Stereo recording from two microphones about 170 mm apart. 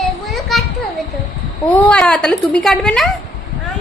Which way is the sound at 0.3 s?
Centre (ahead or behind).